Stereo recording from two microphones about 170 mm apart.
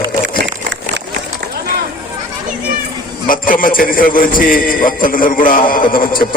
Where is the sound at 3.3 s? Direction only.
55° left (ahead or behind).